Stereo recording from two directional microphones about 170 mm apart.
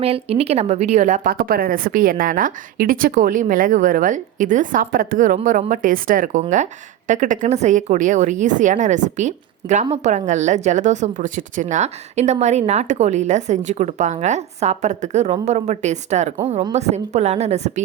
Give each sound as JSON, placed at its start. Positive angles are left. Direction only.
{"t": 0.0, "sound": "speech", "side_deg": -35}
{"t": 1.3, "sound": "a woman's voice", "side_deg": -60}